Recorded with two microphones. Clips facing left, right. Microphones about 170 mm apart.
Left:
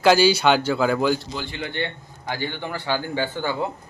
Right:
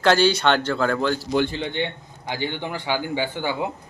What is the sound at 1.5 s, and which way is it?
Speech, 20° right (ahead or behind).